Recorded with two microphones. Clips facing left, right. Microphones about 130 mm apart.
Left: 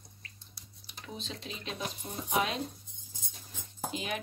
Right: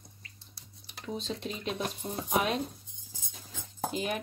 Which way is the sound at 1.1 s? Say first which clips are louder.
Right 6 dB; 45° right (ahead or behind).